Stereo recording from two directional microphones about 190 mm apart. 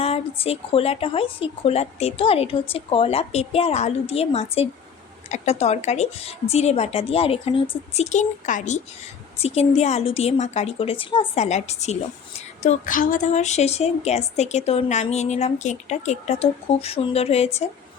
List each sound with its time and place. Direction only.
0.0 s a woman's voice: 30° left (ahead or behind)